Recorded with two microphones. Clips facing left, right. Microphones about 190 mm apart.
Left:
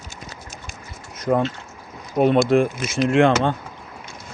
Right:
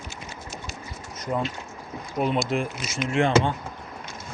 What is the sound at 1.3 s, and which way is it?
Speech, 65° left (ahead or behind).